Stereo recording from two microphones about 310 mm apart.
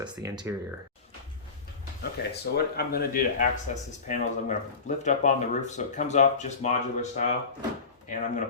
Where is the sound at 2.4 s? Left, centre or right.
Left.